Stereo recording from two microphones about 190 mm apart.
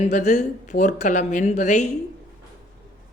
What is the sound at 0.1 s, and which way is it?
A man's voice, 40° left (ahead or behind).